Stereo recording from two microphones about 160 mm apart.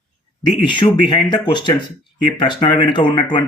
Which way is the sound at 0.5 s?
30° left (ahead or behind).